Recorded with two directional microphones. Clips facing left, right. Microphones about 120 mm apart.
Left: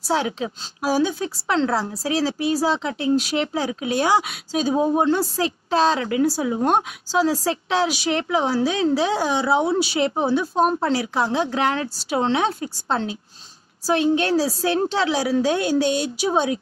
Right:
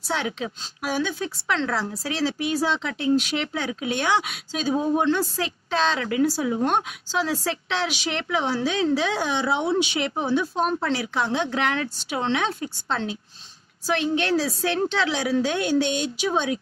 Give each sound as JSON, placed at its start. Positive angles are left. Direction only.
{"t": 0.0, "sound": "a woman's voice", "side_deg": 35}
{"t": 6.6, "sound": "a woman's voice", "side_deg": 40}